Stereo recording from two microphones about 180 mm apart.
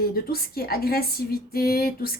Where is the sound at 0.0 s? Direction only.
55° left (ahead or behind).